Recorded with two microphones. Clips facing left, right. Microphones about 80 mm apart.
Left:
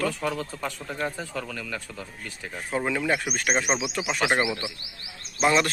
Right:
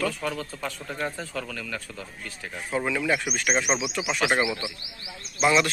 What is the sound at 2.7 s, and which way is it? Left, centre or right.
Speech, left.